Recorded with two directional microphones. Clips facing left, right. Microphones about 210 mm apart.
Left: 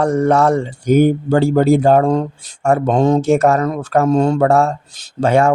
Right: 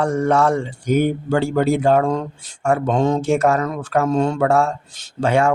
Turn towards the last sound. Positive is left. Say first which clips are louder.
# left 4 dB
turn(degrees=40)  # may be behind; listen again after turning